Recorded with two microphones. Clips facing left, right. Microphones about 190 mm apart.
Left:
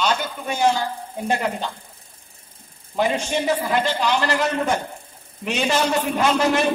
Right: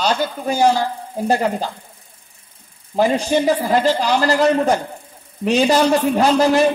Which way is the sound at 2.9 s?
35° right (ahead or behind).